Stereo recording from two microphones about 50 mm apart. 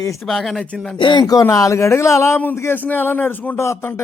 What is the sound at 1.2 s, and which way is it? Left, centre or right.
Speech, left.